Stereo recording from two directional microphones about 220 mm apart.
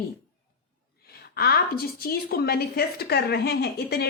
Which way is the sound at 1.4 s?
45° left (ahead or behind).